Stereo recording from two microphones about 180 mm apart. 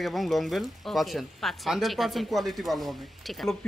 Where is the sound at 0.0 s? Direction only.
Centre (ahead or behind).